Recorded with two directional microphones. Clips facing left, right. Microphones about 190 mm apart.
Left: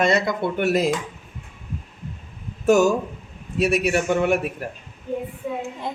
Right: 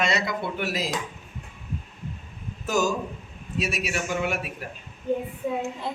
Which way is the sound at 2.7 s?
65° left (ahead or behind).